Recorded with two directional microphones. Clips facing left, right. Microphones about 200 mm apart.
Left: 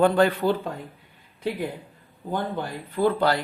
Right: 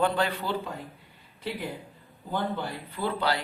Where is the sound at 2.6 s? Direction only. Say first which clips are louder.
Left 8 dB; 50° left (ahead or behind).